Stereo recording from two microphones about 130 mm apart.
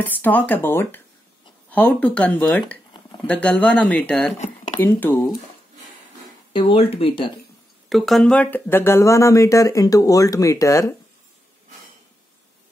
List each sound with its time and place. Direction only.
0.0 s speech: 15° left (ahead or behind)
4.3 s speech: 60° left (ahead or behind)
4.7 s speech: 15° left (ahead or behind)
6.5 s speech: 40° left (ahead or behind)
7.9 s speech: centre (ahead or behind); by 11.0 s 25° left (ahead or behind)